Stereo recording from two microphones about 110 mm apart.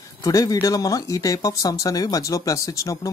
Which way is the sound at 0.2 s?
35° left (ahead or behind).